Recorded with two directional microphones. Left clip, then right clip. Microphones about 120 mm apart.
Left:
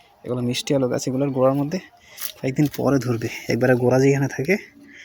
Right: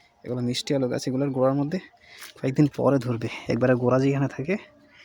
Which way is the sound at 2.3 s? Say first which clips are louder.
Left 1 dB; 60° right (ahead or behind).